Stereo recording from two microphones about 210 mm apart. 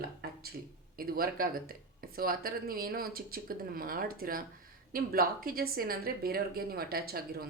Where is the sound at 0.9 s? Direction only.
45° right (ahead or behind).